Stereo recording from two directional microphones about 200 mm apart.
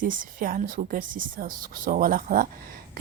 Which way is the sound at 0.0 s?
45° right (ahead or behind).